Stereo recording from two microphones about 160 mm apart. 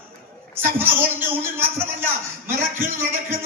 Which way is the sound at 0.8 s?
15° right (ahead or behind).